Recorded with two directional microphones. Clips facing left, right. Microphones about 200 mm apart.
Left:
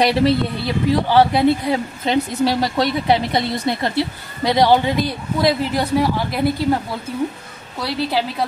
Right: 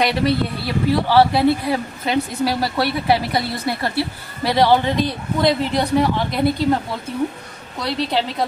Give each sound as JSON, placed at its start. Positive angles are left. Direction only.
{"t": 0.0, "sound": "speech", "side_deg": 25}
{"t": 1.0, "sound": "speech", "side_deg": 15}
{"t": 7.8, "sound": "speech", "side_deg": 5}